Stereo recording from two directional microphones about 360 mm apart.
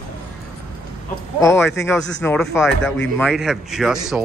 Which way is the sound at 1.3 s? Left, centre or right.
Centre.